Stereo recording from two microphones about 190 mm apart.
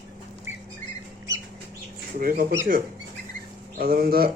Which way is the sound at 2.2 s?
50° right (ahead or behind).